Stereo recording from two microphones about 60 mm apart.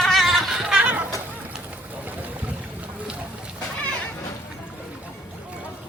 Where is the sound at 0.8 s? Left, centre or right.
Right.